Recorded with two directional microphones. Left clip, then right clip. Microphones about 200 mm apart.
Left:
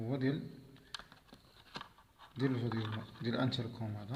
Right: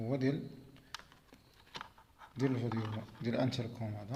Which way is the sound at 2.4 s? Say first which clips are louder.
Right 1 dB; 10° right (ahead or behind).